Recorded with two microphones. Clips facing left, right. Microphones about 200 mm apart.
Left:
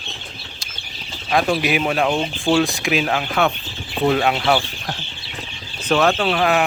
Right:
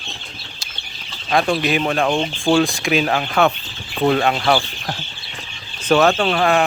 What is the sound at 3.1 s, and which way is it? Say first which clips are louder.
Speech: right 2 dB; 50° right (ahead or behind).